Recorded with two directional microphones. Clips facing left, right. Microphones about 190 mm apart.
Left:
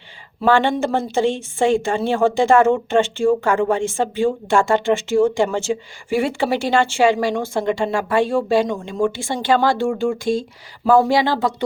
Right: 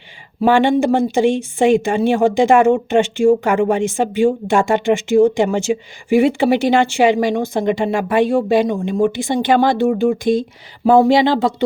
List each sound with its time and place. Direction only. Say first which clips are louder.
0.4 s speech: right 4 dB; 15° right (ahead or behind)